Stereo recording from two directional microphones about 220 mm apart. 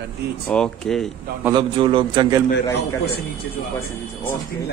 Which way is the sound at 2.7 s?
45° left (ahead or behind).